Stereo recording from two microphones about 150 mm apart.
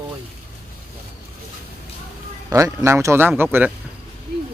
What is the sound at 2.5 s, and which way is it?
A man's voice, 20° right (ahead or behind).